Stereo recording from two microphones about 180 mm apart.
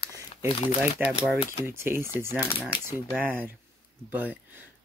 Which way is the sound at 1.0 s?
5° right (ahead or behind).